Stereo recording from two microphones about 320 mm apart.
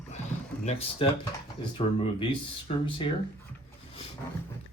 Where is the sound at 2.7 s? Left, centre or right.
Left.